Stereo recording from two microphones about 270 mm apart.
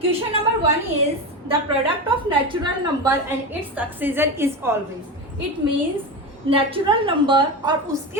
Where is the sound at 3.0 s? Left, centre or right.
Centre.